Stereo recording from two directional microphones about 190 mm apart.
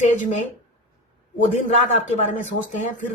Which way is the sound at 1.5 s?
40° left (ahead or behind).